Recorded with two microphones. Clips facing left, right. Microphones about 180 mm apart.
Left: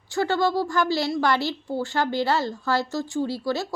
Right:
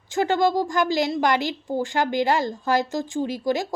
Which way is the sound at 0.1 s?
15° right (ahead or behind).